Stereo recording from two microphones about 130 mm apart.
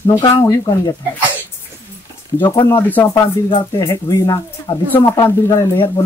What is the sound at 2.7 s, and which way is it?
Speech, 15° left (ahead or behind).